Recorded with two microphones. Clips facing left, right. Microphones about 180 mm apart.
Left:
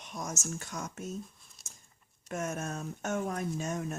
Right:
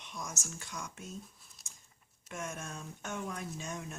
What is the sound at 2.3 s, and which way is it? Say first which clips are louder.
Speech: left 7 dB; 45° left (ahead or behind).